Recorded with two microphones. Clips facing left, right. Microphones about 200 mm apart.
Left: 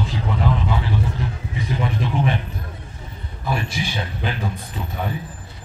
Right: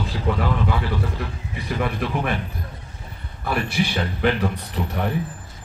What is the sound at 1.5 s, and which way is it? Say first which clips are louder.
Speech: even; 60° right (ahead or behind).